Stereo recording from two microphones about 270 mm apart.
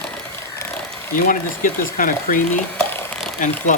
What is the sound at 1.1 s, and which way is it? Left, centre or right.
Speech, left.